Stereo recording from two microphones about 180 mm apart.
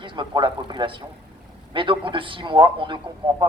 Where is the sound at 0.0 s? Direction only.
25° right (ahead or behind).